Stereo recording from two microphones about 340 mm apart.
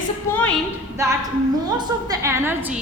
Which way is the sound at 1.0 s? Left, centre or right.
Centre.